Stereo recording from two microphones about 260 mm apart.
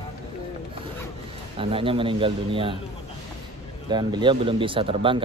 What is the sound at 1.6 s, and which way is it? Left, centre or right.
Speech, right.